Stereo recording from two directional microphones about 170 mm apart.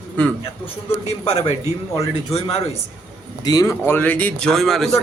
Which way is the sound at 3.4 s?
20° left (ahead or behind).